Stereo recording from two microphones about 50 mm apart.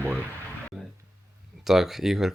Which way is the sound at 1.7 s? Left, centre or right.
Centre.